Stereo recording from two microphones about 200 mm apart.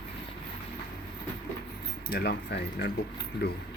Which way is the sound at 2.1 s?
55° left (ahead or behind).